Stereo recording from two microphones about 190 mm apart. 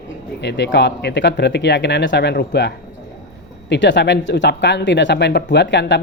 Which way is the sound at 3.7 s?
65° left (ahead or behind).